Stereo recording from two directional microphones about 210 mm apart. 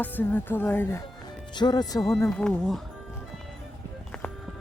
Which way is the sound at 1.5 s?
20° left (ahead or behind).